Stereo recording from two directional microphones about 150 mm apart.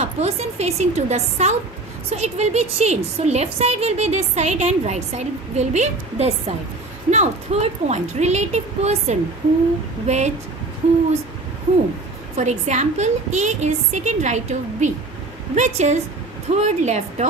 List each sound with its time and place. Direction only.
0.0 s a woman's voice: 45° right (ahead or behind)
12.4 s a woman's voice: 50° right (ahead or behind)